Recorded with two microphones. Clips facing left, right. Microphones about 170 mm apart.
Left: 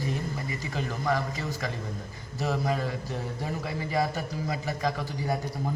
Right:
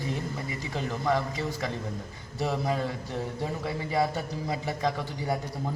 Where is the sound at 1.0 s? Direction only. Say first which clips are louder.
Right 2 dB; 25° right (ahead or behind).